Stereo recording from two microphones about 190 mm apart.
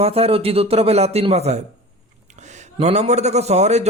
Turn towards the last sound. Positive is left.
turn(degrees=-35)  # may be behind; listen again after turning